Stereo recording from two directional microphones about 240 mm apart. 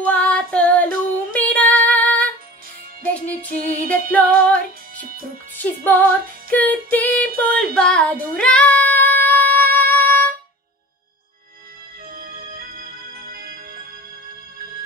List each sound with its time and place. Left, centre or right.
0.0 s child singing: centre
1.3 s female singing: centre
3.5 s music: right
3.9 s music: centre
7.4 s female singing: centre
12.2 s music: right